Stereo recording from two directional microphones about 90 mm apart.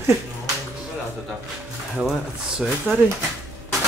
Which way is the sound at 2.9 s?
25° right (ahead or behind).